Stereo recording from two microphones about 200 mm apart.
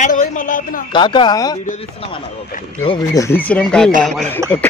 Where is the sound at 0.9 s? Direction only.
25° left (ahead or behind).